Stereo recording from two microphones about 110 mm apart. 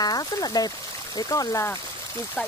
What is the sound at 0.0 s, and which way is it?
Speech, 35° left (ahead or behind).